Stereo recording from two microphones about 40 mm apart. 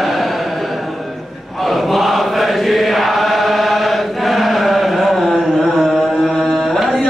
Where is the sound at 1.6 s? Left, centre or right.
Centre.